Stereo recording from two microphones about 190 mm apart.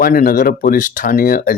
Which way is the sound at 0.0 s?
50° left (ahead or behind).